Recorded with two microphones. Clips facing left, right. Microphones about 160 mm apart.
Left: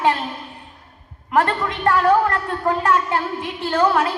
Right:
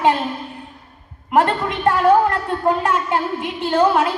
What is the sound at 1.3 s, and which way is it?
A woman's voice, 20° right (ahead or behind).